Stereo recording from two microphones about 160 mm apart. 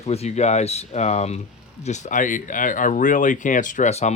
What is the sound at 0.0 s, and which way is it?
Speech, 40° left (ahead or behind).